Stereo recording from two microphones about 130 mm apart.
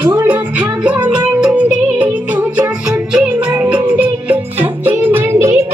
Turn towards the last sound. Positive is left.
turn(degrees=-20)  # may be behind; listen again after turning